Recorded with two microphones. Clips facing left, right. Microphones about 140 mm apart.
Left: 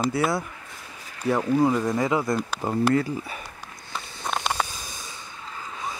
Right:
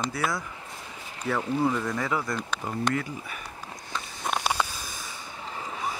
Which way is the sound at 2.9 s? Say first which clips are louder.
Left 7 dB; 35° left (ahead or behind).